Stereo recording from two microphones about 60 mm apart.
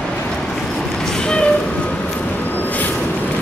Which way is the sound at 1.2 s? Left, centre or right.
Centre.